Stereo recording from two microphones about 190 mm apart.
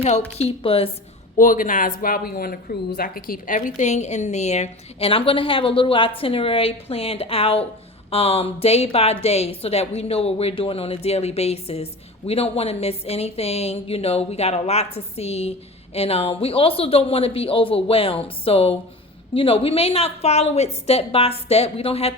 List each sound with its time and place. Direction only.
0.3 s a woman's voice: 30° left (ahead or behind)
1.4 s a woman's voice: 45° left (ahead or behind)